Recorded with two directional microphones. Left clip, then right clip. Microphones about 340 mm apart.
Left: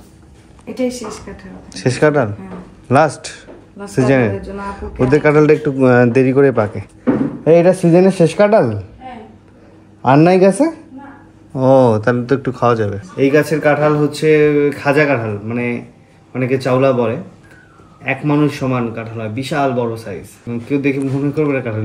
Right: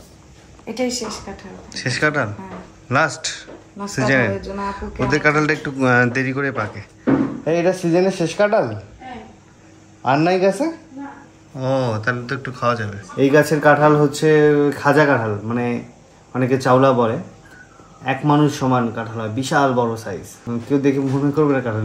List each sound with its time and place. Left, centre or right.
1.3 s speech: right
1.7 s a man's voice: centre
7.4 s speech: centre
10.0 s speech: centre
13.2 s a man's voice: centre